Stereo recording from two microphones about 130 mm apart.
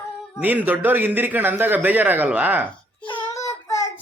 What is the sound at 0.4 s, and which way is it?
A man's voice, 15° right (ahead or behind).